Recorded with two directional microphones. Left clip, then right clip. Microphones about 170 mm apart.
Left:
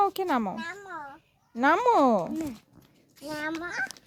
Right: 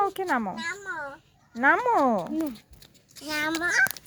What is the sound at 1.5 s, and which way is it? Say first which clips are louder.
Speech: even; 30° left (ahead or behind).